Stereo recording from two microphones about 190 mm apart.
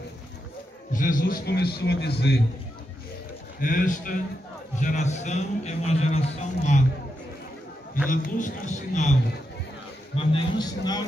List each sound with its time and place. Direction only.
0.9 s a man's voice: 45° left (ahead or behind); by 2.3 s 60° left (ahead or behind)
3.6 s a man's voice: 45° left (ahead or behind)
8.1 s a man's voice: 45° left (ahead or behind)
10.1 s a man's voice: 25° left (ahead or behind)